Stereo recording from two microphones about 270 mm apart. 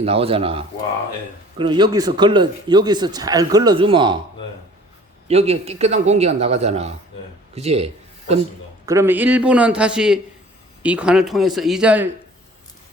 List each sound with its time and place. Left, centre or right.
0.0 s a man's voice: right
5.3 s a man's voice: right
8.9 s a man's voice: centre